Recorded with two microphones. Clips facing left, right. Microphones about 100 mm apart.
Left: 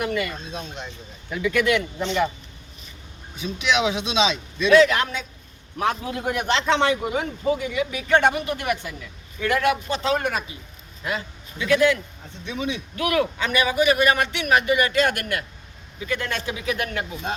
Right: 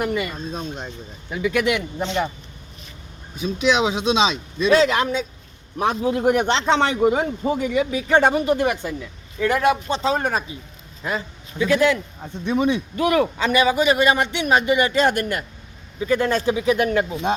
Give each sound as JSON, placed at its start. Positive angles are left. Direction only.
{"t": 0.0, "sound": "a man's voice", "side_deg": -30}
{"t": 1.3, "sound": "a man's voice", "side_deg": -20}
{"t": 3.3, "sound": "a man's voice", "side_deg": -35}
{"t": 4.7, "sound": "a man's voice", "side_deg": -25}
{"t": 11.6, "sound": "a man's voice", "side_deg": -30}
{"t": 12.2, "sound": "speech", "side_deg": -50}
{"t": 13.0, "sound": "a man's voice", "side_deg": -30}